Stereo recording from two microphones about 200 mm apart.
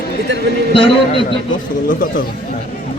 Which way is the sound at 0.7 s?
25° left (ahead or behind).